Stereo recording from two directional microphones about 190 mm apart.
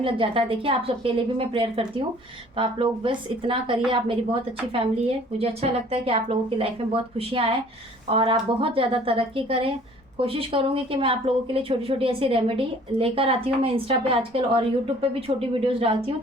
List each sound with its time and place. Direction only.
0.0 s speech: 30° right (ahead or behind)